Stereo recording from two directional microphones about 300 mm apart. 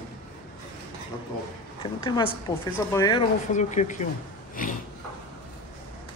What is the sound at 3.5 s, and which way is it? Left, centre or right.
Speech, left.